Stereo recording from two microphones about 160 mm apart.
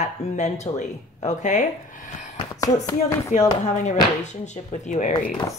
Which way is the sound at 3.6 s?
45° left (ahead or behind).